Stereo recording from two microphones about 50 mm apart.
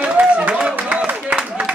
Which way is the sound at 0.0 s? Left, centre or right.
Right.